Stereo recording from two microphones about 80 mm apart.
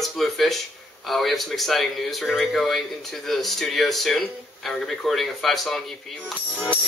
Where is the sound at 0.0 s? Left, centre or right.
Centre.